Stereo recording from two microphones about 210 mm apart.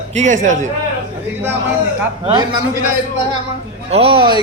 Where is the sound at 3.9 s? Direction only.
25° right (ahead or behind).